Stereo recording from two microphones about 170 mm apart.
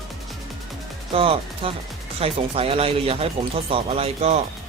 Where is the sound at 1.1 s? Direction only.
35° right (ahead or behind).